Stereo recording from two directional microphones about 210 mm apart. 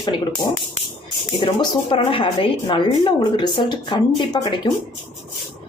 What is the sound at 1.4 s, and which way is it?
Speech, 25° left (ahead or behind).